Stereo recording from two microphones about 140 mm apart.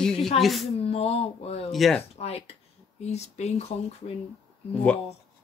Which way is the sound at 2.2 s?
45° left (ahead or behind).